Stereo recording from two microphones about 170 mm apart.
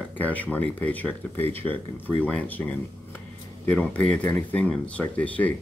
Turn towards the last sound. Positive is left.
turn(degrees=10)  # may be behind; listen again after turning